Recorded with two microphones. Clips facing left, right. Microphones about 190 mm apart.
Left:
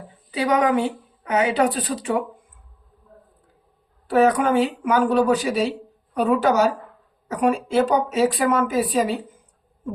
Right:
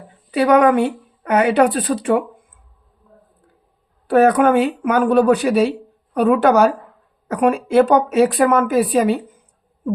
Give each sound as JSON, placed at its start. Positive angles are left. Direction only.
{"t": 0.3, "sound": "speech", "side_deg": -55}
{"t": 4.1, "sound": "speech", "side_deg": -60}